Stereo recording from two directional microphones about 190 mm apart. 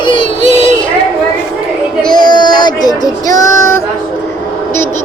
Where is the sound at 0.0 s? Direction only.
25° left (ahead or behind).